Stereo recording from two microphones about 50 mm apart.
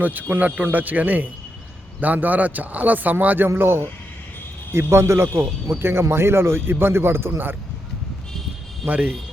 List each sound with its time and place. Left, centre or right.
0.0 s speech: right
3.5 s speech: right
5.7 s a man's voice: right
8.8 s speech: right